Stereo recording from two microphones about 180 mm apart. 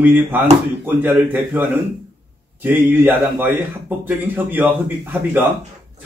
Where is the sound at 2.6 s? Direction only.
10° right (ahead or behind).